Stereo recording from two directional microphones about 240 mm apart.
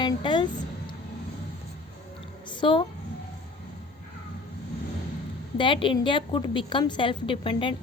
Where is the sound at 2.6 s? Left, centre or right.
Left.